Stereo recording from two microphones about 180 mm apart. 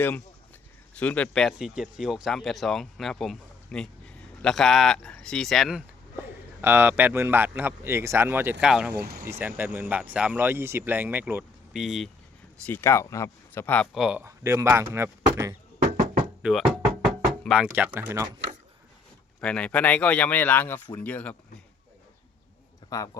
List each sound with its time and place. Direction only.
0.9 s speech: 5° left (ahead or behind)
6.6 s speech: 10° right (ahead or behind)
8.9 s speech: 60° right (ahead or behind)
9.2 s speech: 15° right (ahead or behind)
12.6 s speech: 15° left (ahead or behind)
13.9 s speech: 5° right (ahead or behind)
14.3 s speech: 15° right (ahead or behind)
16.4 s speech: centre (ahead or behind)
19.4 s speech: 5° left (ahead or behind)
22.9 s a man's voice: 20° left (ahead or behind)